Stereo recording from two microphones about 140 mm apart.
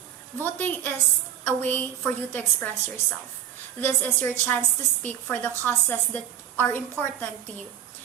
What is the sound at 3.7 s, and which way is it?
A woman's voice, 15° left (ahead or behind).